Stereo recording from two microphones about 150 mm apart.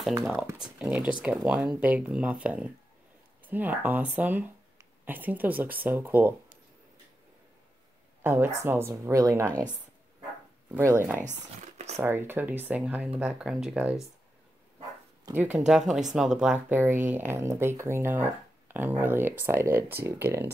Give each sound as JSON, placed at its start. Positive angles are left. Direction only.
{"t": 0.6, "sound": "speech", "side_deg": -5}
{"t": 8.2, "sound": "speech", "side_deg": -15}
{"t": 10.7, "sound": "speech", "side_deg": -15}
{"t": 11.1, "sound": "speech", "side_deg": -50}
{"t": 12.0, "sound": "speech", "side_deg": -15}
{"t": 15.3, "sound": "speech", "side_deg": -15}